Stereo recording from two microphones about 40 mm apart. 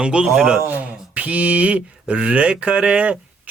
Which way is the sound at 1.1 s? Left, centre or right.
Right.